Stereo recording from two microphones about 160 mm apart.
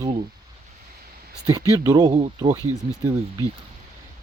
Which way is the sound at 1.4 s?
25° right (ahead or behind).